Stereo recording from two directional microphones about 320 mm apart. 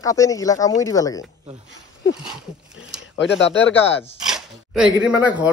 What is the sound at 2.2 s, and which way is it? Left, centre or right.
Speech, centre.